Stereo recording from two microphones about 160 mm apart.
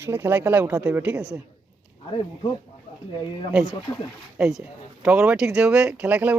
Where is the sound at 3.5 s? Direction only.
5° right (ahead or behind).